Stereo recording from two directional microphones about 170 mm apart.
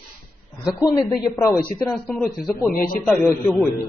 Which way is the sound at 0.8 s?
20° left (ahead or behind).